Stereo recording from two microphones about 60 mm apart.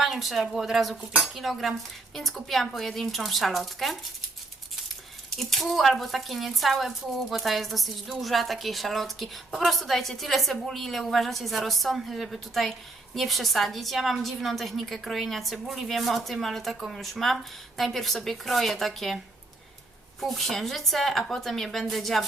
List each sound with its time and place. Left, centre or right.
0.0 s a woman's voice: centre
5.4 s a woman's voice: centre
20.2 s a woman's voice: centre